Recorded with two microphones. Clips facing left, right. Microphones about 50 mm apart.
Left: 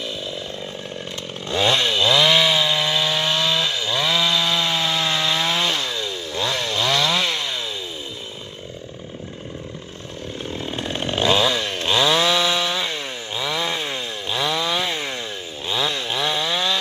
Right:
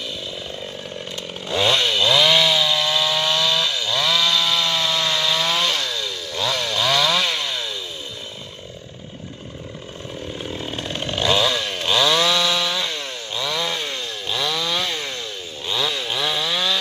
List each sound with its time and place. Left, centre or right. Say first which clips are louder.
0.0 s chainsaw: left 2 dB; centre
10.5 s chainsaw: left 3 dB; centre
15.7 s chainsaw: even; centre